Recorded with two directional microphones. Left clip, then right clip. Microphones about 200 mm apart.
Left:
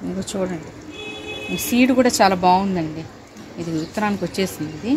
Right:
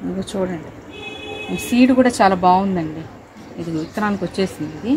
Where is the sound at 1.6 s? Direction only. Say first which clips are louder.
Right 2 dB; 15° left (ahead or behind).